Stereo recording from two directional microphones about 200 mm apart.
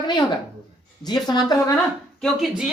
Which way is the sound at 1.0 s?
20° left (ahead or behind).